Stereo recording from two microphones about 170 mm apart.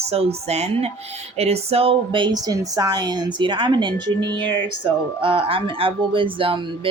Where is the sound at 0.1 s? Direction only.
35° right (ahead or behind).